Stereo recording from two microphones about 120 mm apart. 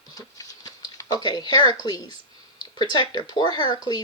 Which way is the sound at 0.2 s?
30° left (ahead or behind).